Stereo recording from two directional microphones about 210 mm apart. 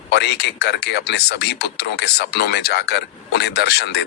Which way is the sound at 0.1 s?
50° left (ahead or behind).